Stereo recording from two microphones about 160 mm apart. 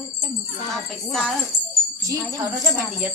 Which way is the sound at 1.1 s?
5° left (ahead or behind).